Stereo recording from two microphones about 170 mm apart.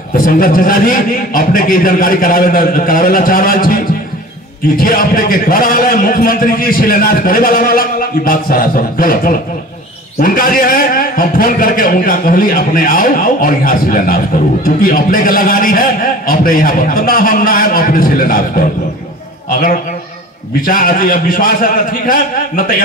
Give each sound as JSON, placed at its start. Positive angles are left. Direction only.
{"t": 0.1, "sound": "a man's voice", "side_deg": 55}